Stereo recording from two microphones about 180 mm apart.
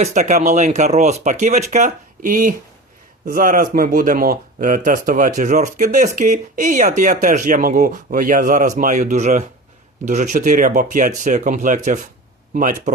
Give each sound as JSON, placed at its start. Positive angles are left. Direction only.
{"t": 0.0, "sound": "speech", "side_deg": -40}